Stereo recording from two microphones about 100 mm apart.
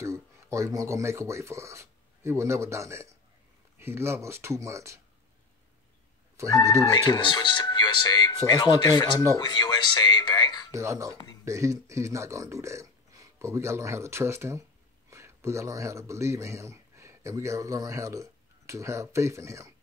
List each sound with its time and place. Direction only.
0.0 s speech: 30° right (ahead or behind)
6.3 s speech: 30° right (ahead or behind)
6.8 s speech: 45° left (ahead or behind)
10.7 s speech: 30° right (ahead or behind)